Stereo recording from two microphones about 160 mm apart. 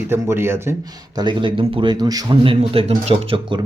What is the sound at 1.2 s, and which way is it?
Speech, 30° right (ahead or behind).